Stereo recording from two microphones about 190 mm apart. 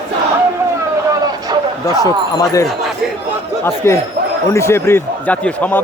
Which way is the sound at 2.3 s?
15° left (ahead or behind).